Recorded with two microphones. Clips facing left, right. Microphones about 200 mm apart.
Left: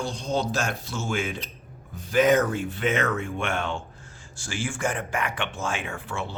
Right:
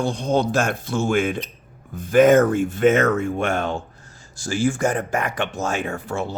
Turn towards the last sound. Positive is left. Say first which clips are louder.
# right 7 dB
turn(degrees=-40)  # may be behind; listen again after turning